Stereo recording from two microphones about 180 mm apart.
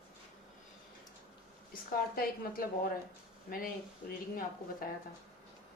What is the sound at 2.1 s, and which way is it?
A woman's voice, 55° left (ahead or behind).